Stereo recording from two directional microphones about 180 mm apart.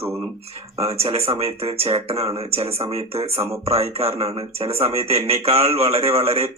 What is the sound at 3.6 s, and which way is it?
A man's voice, 35° right (ahead or behind).